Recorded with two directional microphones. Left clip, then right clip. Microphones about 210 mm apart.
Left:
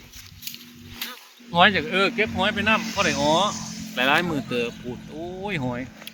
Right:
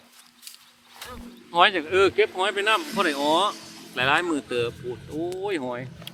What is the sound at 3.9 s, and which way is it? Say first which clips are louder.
Speech: left 1 dB; centre (ahead or behind).